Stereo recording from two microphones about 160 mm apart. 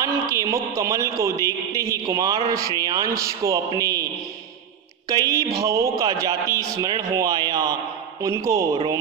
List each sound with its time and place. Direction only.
0.0 s speech: 20° right (ahead or behind)
5.1 s speech: 20° right (ahead or behind)